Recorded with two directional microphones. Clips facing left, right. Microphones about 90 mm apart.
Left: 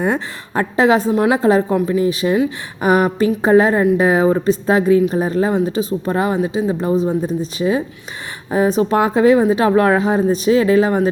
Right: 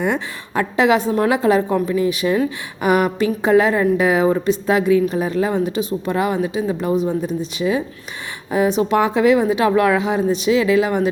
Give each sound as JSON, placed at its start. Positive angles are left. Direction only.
{"t": 0.0, "sound": "a woman's voice", "side_deg": 35}